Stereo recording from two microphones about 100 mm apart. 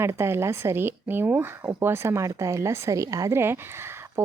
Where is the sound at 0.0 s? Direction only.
25° right (ahead or behind).